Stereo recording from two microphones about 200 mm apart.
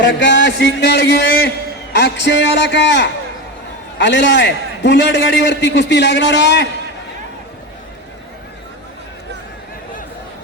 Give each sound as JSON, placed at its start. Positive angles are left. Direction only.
{"t": 0.0, "sound": "a man's voice", "side_deg": 65}